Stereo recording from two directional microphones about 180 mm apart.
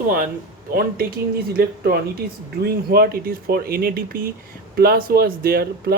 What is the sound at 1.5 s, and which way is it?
Speech, 60° right (ahead or behind).